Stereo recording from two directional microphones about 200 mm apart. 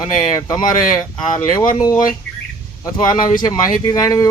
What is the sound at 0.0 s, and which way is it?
Speech, 20° left (ahead or behind).